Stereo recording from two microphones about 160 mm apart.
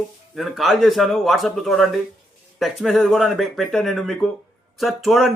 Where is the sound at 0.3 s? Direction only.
Centre (ahead or behind).